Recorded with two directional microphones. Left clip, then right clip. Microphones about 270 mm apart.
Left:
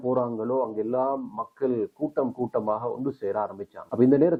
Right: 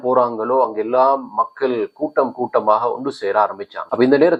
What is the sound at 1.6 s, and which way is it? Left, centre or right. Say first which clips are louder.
Speech: right 7 dB; centre.